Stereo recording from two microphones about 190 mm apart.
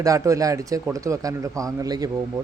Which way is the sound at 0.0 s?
15° right (ahead or behind).